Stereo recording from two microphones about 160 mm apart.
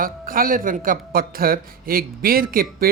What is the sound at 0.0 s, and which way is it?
Speech, 60° right (ahead or behind).